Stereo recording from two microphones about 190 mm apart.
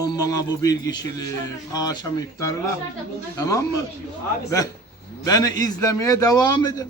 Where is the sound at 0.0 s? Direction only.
20° left (ahead or behind).